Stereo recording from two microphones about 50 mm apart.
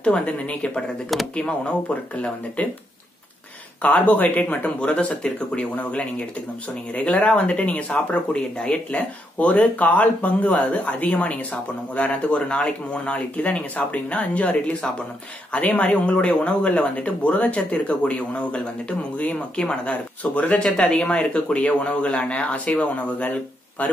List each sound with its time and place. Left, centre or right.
0.0 s speech: left
3.8 s speech: left
4.7 s speech: left
19.5 s speech: centre
19.8 s speech: left
20.6 s speech: centre